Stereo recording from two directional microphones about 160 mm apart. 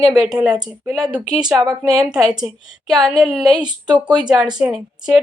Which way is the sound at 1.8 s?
5° right (ahead or behind).